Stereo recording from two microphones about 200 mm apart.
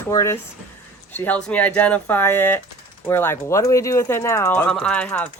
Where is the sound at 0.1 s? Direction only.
15° left (ahead or behind).